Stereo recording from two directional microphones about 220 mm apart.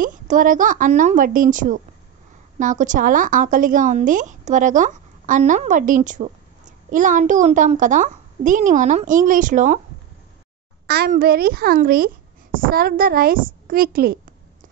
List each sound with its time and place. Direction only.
0.0 s a woman's voice: 35° right (ahead or behind)
10.9 s a child's voice: 45° right (ahead or behind)